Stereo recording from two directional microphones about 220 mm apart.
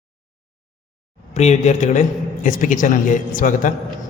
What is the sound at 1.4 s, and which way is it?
A man's voice, 30° left (ahead or behind).